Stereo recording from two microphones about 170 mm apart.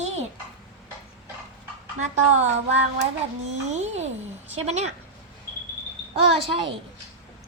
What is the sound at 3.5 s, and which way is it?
Child singing, 40° right (ahead or behind).